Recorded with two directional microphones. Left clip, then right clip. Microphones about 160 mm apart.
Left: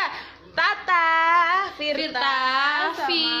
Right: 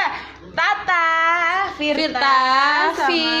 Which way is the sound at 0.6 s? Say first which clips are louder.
Right 3 dB; 35° left (ahead or behind).